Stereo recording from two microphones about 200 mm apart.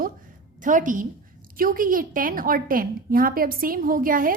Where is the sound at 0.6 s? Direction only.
40° right (ahead or behind).